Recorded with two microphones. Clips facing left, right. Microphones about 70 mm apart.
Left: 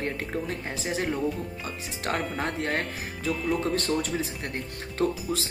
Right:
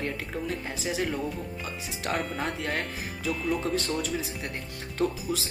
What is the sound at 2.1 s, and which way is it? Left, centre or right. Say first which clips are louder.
Speech: left 1 dB; left.